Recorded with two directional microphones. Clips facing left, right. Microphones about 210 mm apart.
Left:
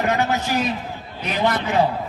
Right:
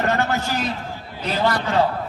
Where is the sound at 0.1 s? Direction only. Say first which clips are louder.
Left 1 dB; 15° left (ahead or behind).